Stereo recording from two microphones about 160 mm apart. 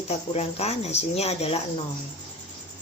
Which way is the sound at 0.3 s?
40° left (ahead or behind).